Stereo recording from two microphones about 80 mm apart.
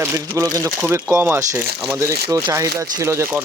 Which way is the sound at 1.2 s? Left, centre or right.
Right.